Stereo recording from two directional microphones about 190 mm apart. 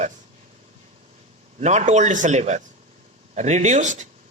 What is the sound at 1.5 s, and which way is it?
A woman's voice, 35° right (ahead or behind).